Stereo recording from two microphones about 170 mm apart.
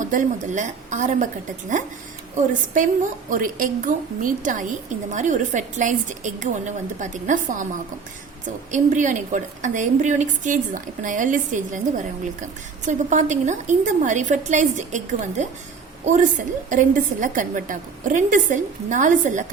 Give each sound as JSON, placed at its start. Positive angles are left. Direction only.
{"t": 0.0, "sound": "a woman's voice", "side_deg": -50}
{"t": 2.5, "sound": "a woman's voice", "side_deg": -50}
{"t": 8.7, "sound": "a woman's voice", "side_deg": -45}